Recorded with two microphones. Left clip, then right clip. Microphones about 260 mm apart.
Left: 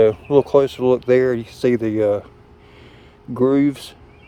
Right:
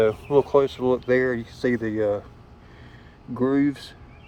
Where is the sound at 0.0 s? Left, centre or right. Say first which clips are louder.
Left 5 dB; left.